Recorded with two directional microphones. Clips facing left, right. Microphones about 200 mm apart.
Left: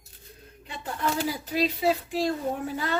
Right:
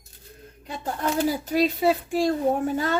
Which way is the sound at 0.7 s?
45° right (ahead or behind).